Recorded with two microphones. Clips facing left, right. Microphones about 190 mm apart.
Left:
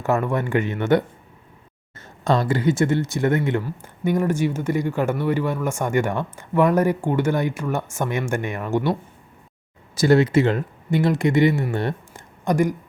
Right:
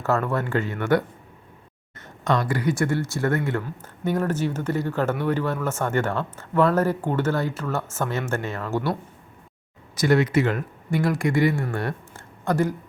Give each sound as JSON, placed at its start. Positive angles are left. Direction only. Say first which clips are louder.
{"t": 0.0, "sound": "speech", "louder": "left 2 dB", "side_deg": 15}
{"t": 9.9, "sound": "speech", "louder": "left 3 dB", "side_deg": 30}